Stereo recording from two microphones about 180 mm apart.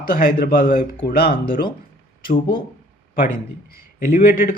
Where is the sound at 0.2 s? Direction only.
55° left (ahead or behind).